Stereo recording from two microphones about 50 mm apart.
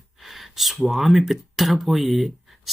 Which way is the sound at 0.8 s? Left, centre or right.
Centre.